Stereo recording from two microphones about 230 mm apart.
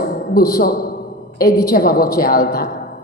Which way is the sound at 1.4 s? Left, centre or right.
Left.